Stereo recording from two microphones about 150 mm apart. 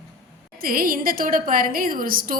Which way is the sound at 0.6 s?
70° right (ahead or behind).